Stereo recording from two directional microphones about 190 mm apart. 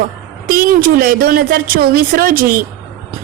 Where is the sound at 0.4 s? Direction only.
50° right (ahead or behind).